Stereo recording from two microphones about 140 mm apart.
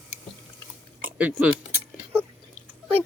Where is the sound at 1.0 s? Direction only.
10° right (ahead or behind).